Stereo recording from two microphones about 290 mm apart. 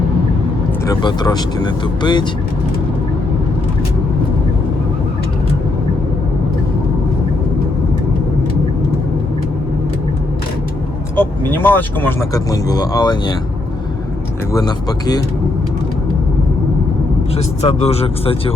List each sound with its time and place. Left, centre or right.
0.9 s speech: centre
11.2 s speech: centre
14.5 s speech: centre
17.3 s speech: left